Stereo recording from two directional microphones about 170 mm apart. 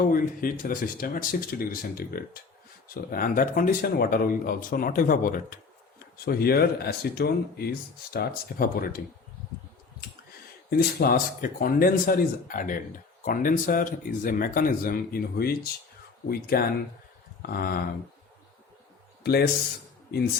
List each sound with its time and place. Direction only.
0.0 s speech: 55° left (ahead or behind)
10.7 s speech: 60° left (ahead or behind)
19.2 s a man's voice: 70° left (ahead or behind)